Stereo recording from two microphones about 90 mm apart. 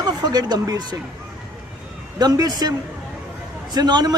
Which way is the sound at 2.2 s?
45° right (ahead or behind).